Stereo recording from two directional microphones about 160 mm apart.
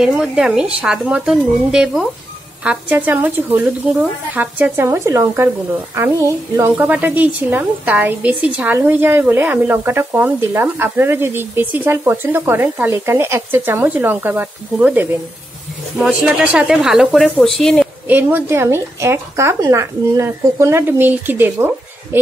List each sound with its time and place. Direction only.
0.0 s speech: 5° right (ahead or behind)
18.0 s speech: 10° right (ahead or behind)